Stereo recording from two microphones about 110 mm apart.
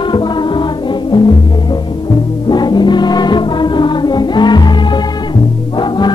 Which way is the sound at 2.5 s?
40° left (ahead or behind).